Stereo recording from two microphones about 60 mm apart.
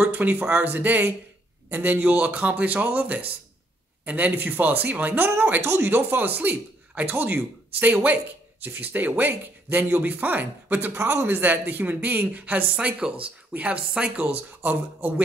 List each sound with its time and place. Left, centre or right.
0.0 s a man's voice: right